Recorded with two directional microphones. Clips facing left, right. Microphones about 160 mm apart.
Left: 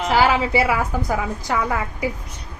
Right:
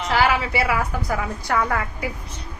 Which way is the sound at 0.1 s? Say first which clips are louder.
Left 3 dB; 25° left (ahead or behind).